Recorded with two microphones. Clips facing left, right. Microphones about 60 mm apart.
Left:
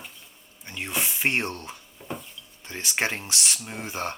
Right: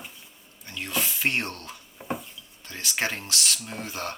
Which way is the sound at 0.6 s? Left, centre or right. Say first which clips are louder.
Even; left.